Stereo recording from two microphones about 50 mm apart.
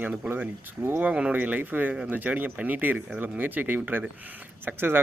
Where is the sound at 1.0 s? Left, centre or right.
Right.